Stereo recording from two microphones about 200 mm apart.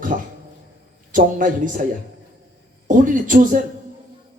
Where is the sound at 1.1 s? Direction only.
40° right (ahead or behind).